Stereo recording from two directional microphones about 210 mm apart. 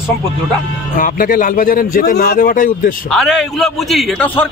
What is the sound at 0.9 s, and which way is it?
Speech, 40° left (ahead or behind).